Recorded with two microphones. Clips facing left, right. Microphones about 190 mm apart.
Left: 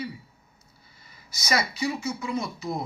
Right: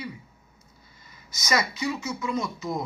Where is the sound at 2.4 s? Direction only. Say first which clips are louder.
Right 1 dB; 30° left (ahead or behind).